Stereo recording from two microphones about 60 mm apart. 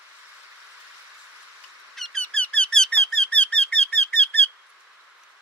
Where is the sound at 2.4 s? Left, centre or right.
Centre.